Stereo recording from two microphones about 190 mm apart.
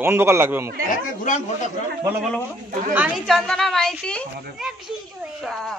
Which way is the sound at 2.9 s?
10° right (ahead or behind).